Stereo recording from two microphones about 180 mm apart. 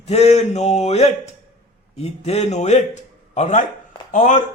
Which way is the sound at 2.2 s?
35° left (ahead or behind).